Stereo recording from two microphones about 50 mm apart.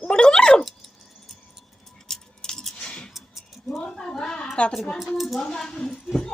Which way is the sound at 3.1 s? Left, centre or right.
Centre.